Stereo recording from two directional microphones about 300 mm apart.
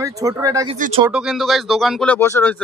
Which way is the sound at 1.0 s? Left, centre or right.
Centre.